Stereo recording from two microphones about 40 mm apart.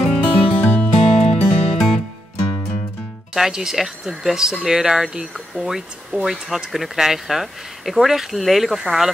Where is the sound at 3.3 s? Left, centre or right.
Centre.